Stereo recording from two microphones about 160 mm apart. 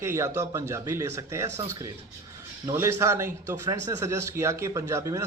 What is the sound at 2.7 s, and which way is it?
A man's voice, 15° right (ahead or behind).